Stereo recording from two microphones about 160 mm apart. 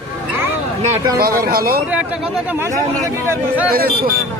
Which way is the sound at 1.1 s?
70° right (ahead or behind).